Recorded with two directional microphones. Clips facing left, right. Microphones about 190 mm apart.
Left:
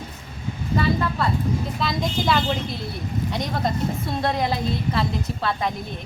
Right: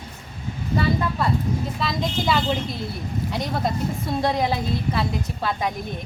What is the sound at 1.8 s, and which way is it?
A woman's voice, centre (ahead or behind).